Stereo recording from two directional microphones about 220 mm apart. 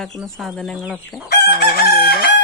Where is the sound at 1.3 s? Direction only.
45° left (ahead or behind).